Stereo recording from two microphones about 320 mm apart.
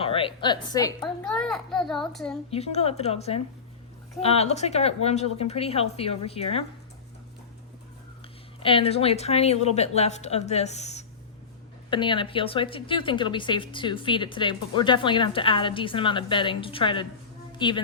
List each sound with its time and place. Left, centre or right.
0.0 s a woman's voice: centre
1.2 s a child's voice: centre
2.5 s a woman's voice: centre
8.6 s a woman's voice: centre